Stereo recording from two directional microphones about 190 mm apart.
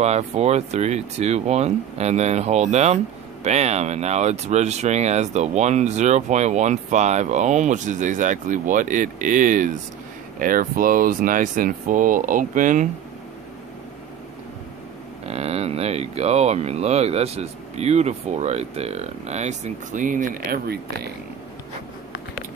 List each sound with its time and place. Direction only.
0.0 s speech: 35° right (ahead or behind)
15.2 s speech: 35° right (ahead or behind); by 21.1 s 55° right (ahead or behind)